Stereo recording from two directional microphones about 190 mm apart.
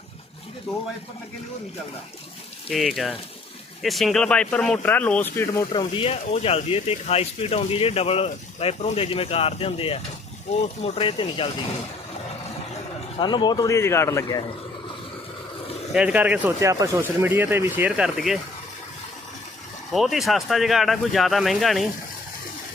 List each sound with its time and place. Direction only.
2.6 s speech: centre (ahead or behind)
5.7 s a man's voice: 25° left (ahead or behind)
13.1 s a man's voice: 25° left (ahead or behind)
15.9 s speech: 5° right (ahead or behind)
19.9 s speech: centre (ahead or behind)